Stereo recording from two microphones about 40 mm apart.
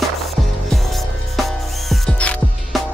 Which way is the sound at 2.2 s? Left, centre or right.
Left.